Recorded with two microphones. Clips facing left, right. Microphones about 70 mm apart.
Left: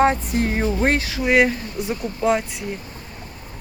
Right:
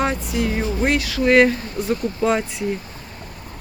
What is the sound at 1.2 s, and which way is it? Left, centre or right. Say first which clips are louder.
Speech: right 3 dB; centre.